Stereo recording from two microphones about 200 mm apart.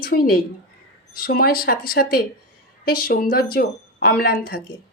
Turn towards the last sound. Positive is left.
turn(degrees=50)  # may be behind; listen again after turning